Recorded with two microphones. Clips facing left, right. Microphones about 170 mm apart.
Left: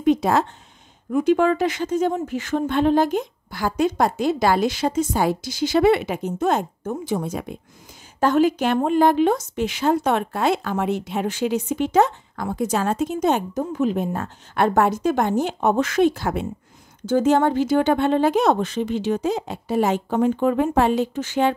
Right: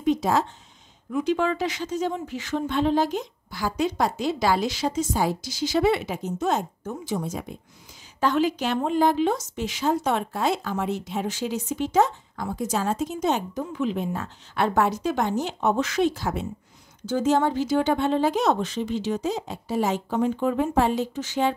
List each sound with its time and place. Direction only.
0.0 s a sound: 60° left (ahead or behind)
1.1 s speech: 50° left (ahead or behind)
8.2 s a woman's voice: 50° left (ahead or behind)